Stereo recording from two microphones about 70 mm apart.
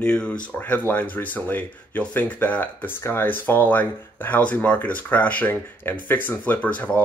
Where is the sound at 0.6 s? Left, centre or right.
Left.